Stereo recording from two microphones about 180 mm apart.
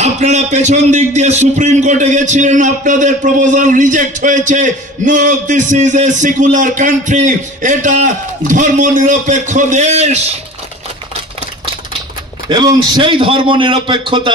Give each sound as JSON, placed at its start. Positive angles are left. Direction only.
{"t": 0.0, "sound": "a man's voice", "side_deg": -40}
{"t": 12.4, "sound": "a man's voice", "side_deg": -25}